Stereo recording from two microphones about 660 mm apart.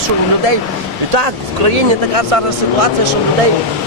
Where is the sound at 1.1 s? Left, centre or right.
Right.